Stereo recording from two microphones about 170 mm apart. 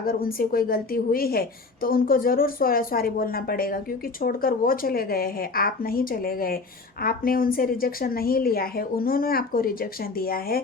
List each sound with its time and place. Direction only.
0.0 s a woman's voice: 60° left (ahead or behind)